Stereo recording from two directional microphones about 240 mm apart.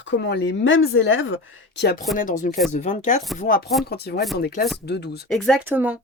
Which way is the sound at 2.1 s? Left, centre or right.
Left.